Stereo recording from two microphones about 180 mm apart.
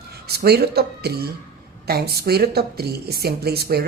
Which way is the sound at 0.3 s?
60° right (ahead or behind).